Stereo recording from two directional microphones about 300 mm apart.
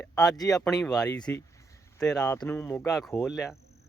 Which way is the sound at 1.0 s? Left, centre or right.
Centre.